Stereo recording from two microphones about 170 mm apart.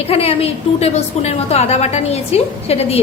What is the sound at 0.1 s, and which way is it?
A woman's voice, 35° left (ahead or behind).